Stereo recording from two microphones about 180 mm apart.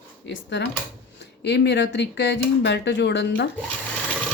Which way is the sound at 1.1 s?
70° left (ahead or behind).